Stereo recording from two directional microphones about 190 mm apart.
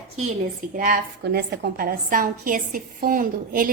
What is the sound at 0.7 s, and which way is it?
A woman's voice, 45° right (ahead or behind).